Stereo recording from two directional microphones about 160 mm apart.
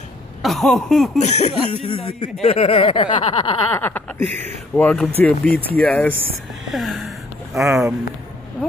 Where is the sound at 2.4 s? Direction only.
40° left (ahead or behind).